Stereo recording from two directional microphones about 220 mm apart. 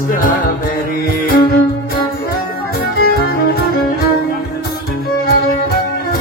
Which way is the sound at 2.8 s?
45° left (ahead or behind).